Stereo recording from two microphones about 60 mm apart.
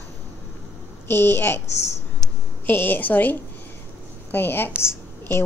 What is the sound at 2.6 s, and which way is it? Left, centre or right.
A woman's voice, left.